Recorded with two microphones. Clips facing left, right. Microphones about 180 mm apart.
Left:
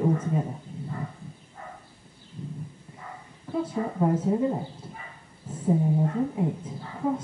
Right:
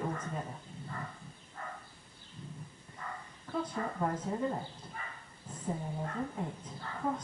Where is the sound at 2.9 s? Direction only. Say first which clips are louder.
Even; 10° left (ahead or behind).